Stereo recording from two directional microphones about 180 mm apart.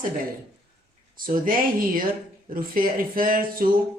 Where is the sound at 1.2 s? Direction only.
50° right (ahead or behind).